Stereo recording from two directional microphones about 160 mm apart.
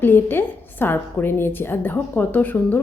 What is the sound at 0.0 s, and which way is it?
A woman's voice, 15° left (ahead or behind).